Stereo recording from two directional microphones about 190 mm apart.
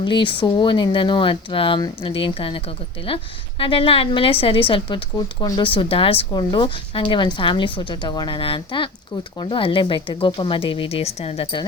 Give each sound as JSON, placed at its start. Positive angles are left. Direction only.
{"t": 0.0, "sound": "a woman's voice", "side_deg": 25}